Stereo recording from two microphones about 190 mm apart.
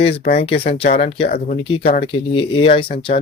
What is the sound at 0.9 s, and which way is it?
Speech, 35° left (ahead or behind).